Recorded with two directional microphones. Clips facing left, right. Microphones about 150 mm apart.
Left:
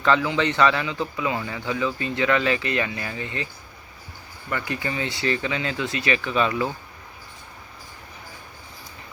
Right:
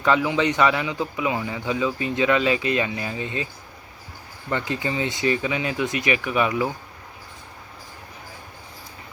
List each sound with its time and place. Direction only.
0.0 s a man's voice: 15° right (ahead or behind)